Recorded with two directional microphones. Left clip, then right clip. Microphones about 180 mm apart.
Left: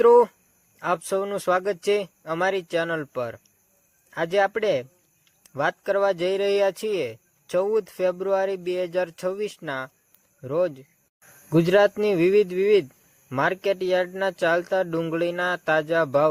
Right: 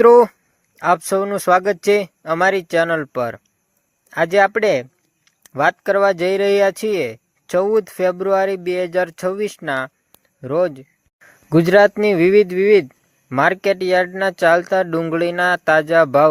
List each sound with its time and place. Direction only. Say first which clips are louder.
0.0 s speech: right 6 dB; 35° right (ahead or behind)